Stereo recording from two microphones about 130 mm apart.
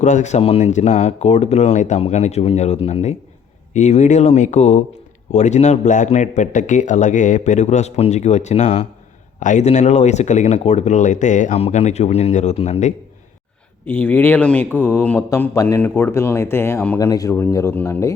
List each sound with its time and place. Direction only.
0.0 s a man's voice: 65° left (ahead or behind)
11.5 s a man's voice: 50° left (ahead or behind)
13.8 s speech: 15° left (ahead or behind)
17.0 s speech: 25° left (ahead or behind)